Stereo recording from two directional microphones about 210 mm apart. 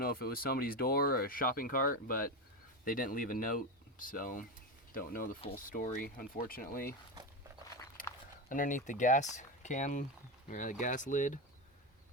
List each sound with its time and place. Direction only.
0.0 s speech: 45° left (ahead or behind)
8.4 s speech: 40° left (ahead or behind)